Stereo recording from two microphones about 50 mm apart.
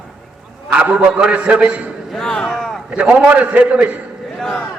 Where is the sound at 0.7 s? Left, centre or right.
Right.